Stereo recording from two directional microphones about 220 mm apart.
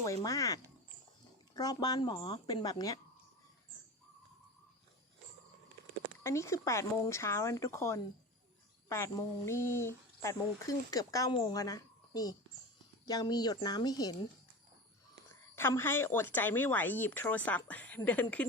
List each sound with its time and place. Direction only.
0.0 s speech: 15° left (ahead or behind)
6.2 s speech: 15° left (ahead or behind)
15.3 s speech: 10° left (ahead or behind)